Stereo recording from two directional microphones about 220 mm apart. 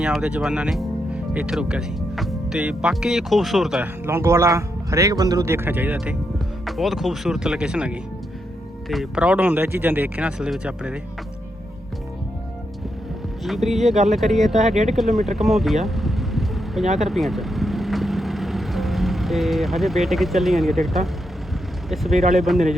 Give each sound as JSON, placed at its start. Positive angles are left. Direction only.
{"t": 0.0, "sound": "speech", "side_deg": -5}
{"t": 13.4, "sound": "speech", "side_deg": 0}
{"t": 14.7, "sound": "speech", "side_deg": -30}
{"t": 14.9, "sound": "a sound", "side_deg": 0}
{"t": 21.8, "sound": "speech", "side_deg": 0}